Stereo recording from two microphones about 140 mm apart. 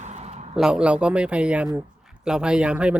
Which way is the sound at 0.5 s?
5° right (ahead or behind).